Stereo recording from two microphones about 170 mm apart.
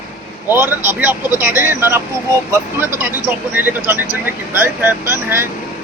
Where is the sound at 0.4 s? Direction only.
10° right (ahead or behind).